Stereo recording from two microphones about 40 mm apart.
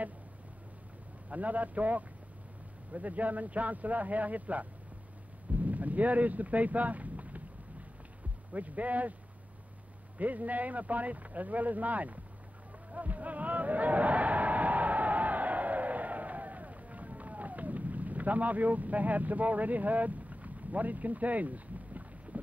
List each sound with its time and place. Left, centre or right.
1.3 s speech: right
8.5 s speech: right
10.1 s speech: right
12.9 s a sound: right